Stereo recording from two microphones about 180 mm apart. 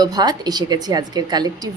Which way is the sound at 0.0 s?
20° right (ahead or behind).